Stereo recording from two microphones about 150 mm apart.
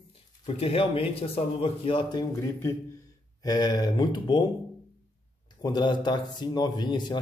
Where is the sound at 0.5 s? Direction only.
40° left (ahead or behind).